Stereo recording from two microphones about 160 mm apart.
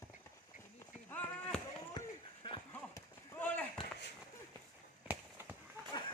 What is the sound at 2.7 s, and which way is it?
Run, 15° left (ahead or behind).